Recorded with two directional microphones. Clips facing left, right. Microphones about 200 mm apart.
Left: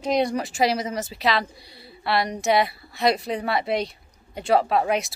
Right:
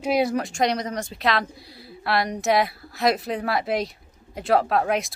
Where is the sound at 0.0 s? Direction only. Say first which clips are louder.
Right 1 dB; 5° right (ahead or behind).